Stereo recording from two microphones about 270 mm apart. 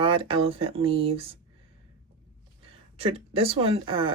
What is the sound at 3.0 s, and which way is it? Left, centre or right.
Speech, right.